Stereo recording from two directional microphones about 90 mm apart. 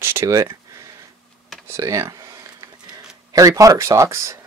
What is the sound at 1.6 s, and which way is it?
Speech, 35° right (ahead or behind).